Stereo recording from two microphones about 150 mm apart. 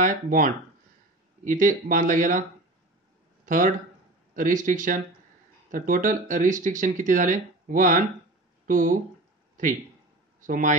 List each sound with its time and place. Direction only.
0.0 s speech: 60° right (ahead or behind)
3.4 s speech: 60° right (ahead or behind)
10.4 s speech: 60° right (ahead or behind)